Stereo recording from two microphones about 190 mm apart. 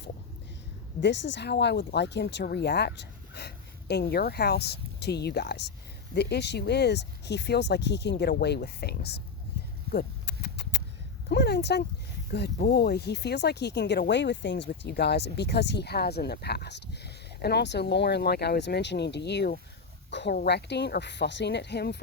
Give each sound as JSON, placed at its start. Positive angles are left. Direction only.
{"t": 1.0, "sound": "speech", "side_deg": 70}
{"t": 9.9, "sound": "a sound", "side_deg": 60}
{"t": 11.3, "sound": "speech", "side_deg": 60}